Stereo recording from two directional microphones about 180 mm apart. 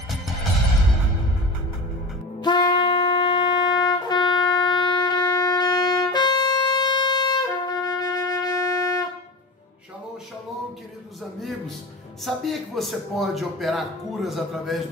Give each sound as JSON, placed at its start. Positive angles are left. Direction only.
{"t": 2.4, "sound": "wind instrument", "side_deg": 25}
{"t": 12.3, "sound": "a man's voice", "side_deg": 0}